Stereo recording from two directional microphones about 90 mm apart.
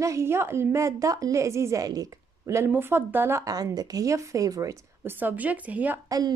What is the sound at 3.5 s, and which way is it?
A woman's voice, 45° right (ahead or behind).